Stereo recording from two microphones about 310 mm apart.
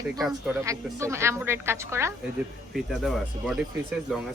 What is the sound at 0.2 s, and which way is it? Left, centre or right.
A woman's voice, centre.